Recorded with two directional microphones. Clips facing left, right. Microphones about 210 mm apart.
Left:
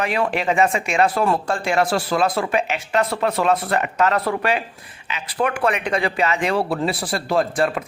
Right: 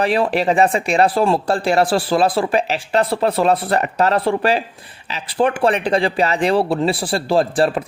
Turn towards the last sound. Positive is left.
turn(degrees=-30)  # may be behind; listen again after turning